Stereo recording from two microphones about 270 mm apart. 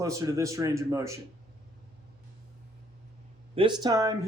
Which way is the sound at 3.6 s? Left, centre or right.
Centre.